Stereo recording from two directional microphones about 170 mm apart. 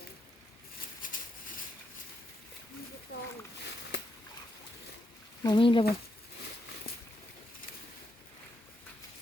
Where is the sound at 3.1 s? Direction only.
65° left (ahead or behind).